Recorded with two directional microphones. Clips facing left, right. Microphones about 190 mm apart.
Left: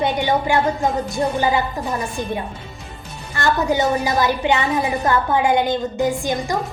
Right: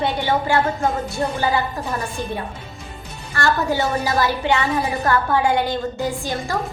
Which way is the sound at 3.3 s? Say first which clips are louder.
Left 1 dB; 20° left (ahead or behind).